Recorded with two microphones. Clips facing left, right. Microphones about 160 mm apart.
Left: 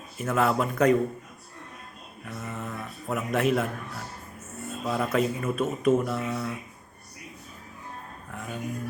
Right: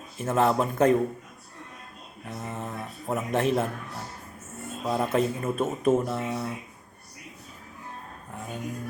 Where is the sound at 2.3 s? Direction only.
25° right (ahead or behind).